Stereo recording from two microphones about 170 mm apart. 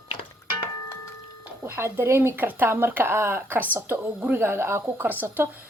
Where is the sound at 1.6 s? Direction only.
15° right (ahead or behind).